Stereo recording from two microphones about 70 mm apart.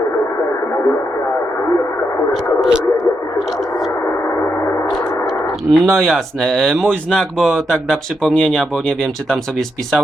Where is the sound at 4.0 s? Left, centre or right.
Left.